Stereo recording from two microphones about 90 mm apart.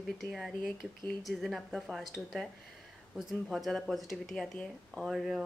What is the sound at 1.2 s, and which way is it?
Speech, centre (ahead or behind).